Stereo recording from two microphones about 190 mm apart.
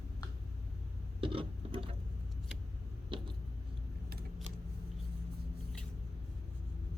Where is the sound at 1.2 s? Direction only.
30° right (ahead or behind).